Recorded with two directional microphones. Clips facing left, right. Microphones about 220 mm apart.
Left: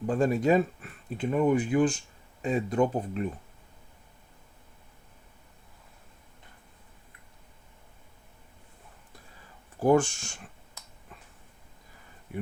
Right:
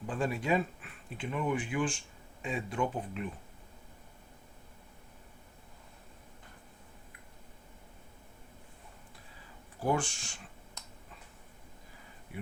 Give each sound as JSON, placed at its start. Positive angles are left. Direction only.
{"t": 0.0, "sound": "speech", "side_deg": 40}
{"t": 9.8, "sound": "speech", "side_deg": 45}